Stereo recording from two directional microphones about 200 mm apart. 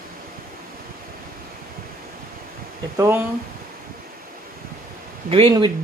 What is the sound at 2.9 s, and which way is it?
Speech, 10° right (ahead or behind).